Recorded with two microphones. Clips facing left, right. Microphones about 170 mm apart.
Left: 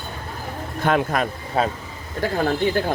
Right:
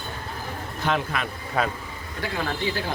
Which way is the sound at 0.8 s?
50° left (ahead or behind).